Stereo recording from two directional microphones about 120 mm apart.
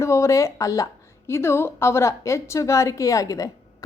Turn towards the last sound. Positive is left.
turn(degrees=30)  # may be behind; listen again after turning